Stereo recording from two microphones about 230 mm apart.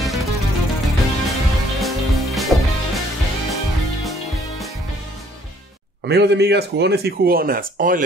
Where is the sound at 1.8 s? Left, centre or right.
Centre.